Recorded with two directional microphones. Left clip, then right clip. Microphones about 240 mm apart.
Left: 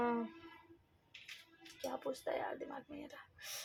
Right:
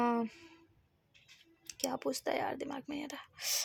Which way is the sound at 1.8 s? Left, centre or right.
Right.